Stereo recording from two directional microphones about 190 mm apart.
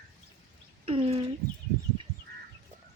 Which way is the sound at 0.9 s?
30° right (ahead or behind).